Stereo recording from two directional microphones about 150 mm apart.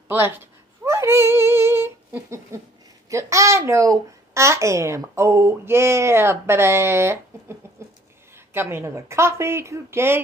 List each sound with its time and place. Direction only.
0.1 s cat: 15° right (ahead or behind)
3.1 s speech: 20° right (ahead or behind)
8.5 s speech: 15° right (ahead or behind)